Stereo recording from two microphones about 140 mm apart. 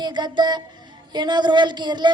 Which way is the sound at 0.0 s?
30° right (ahead or behind).